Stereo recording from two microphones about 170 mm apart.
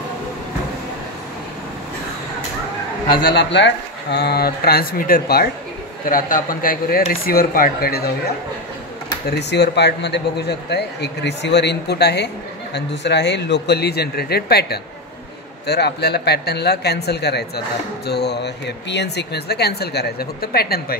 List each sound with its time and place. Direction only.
3.3 s speech: 90° left; by 8.1 s 65° left (ahead or behind)
9.3 s speech: 85° left
12.7 s speech: 90° left; by 20.8 s 65° left (ahead or behind)